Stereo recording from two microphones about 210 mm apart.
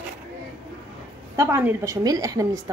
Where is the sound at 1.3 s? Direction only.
10° right (ahead or behind).